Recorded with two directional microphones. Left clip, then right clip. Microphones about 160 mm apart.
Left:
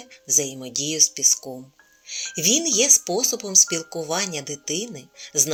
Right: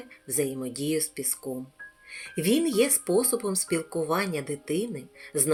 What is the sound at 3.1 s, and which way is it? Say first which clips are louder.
Speech: left 1 dB; 40° left (ahead or behind).